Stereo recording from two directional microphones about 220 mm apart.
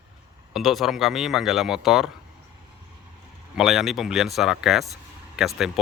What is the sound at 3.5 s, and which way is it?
Speech, centre (ahead or behind).